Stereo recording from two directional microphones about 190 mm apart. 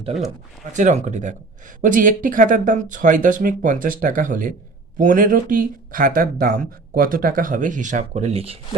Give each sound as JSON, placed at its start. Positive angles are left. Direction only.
{"t": 0.6, "sound": "speech", "side_deg": -40}